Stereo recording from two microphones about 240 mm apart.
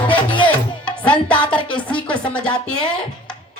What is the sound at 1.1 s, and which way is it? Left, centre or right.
Mantra, centre.